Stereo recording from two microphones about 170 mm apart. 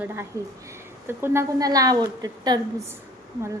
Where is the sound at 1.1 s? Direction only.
15° right (ahead or behind).